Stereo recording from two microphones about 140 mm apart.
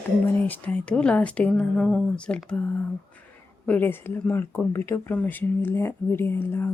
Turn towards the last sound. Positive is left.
turn(degrees=15)  # may be behind; listen again after turning